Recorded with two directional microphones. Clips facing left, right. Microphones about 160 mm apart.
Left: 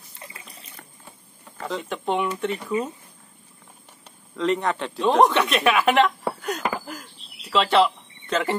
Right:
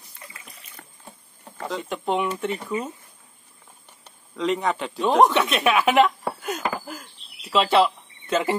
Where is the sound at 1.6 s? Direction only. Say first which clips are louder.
Even; centre (ahead or behind).